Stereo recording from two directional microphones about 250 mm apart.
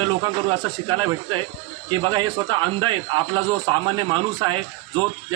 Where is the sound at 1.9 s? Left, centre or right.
Centre.